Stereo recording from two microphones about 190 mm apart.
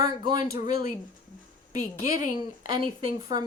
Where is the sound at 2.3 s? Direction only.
25° right (ahead or behind).